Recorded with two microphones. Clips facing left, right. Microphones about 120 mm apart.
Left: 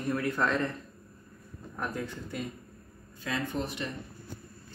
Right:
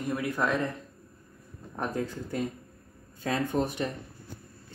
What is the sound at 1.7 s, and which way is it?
Speech, 30° right (ahead or behind).